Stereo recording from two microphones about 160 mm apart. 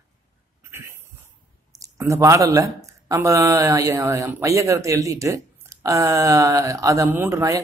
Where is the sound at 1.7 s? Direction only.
20° right (ahead or behind).